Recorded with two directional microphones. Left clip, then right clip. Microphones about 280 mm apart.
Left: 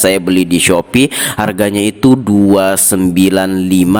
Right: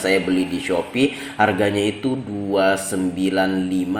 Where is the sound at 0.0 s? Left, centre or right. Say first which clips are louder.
Left 8 dB; left.